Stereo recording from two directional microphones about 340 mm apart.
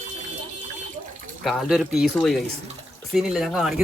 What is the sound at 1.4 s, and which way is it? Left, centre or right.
Speech, centre.